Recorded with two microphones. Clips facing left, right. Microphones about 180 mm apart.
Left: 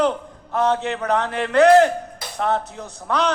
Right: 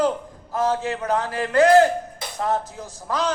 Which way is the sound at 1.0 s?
70° left (ahead or behind).